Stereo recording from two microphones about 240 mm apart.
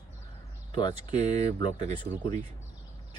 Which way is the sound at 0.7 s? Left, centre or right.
Centre.